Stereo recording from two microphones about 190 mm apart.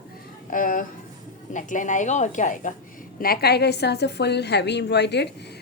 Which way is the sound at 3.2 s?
55° left (ahead or behind).